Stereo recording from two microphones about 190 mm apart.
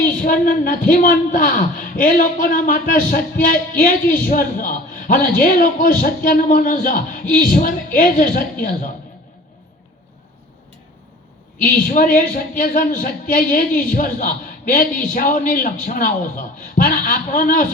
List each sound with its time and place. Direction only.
0.0 s a man's voice: 45° left (ahead or behind)
11.6 s a man's voice: 45° left (ahead or behind)